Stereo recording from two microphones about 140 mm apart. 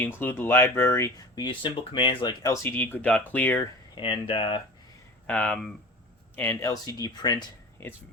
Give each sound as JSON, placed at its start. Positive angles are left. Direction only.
{"t": 0.0, "sound": "speech", "side_deg": 10}
{"t": 1.4, "sound": "speech", "side_deg": 35}
{"t": 2.4, "sound": "speech", "side_deg": 20}
{"t": 3.9, "sound": "speech", "side_deg": 40}
{"t": 5.2, "sound": "speech", "side_deg": 10}
{"t": 6.3, "sound": "speech", "side_deg": 15}